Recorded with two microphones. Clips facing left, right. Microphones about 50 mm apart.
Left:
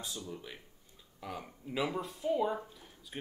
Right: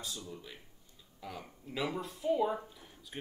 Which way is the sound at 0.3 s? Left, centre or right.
Centre.